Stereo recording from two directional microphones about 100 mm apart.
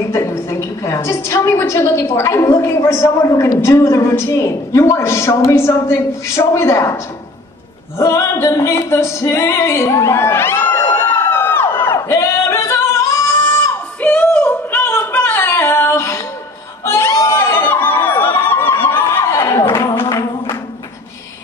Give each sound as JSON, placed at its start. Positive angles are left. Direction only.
{"t": 0.1, "sound": "a woman's voice", "side_deg": 30}
{"t": 8.0, "sound": "music", "side_deg": 30}
{"t": 14.0, "sound": "singing", "side_deg": 15}
{"t": 16.8, "sound": "a sound", "side_deg": 25}
{"t": 19.3, "sound": "a sound", "side_deg": 35}
{"t": 19.6, "sound": "music", "side_deg": 30}